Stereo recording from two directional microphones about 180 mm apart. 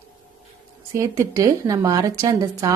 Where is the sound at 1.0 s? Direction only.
20° right (ahead or behind).